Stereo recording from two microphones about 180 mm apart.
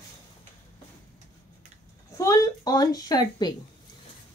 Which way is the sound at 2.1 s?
15° left (ahead or behind).